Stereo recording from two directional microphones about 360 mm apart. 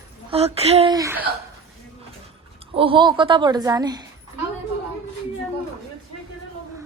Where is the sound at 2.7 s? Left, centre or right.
Centre.